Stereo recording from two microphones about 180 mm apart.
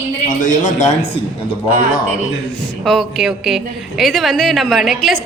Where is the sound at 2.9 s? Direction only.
Centre (ahead or behind).